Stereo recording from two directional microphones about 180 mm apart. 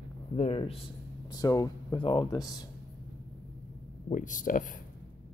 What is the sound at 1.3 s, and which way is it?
Speech, 20° left (ahead or behind).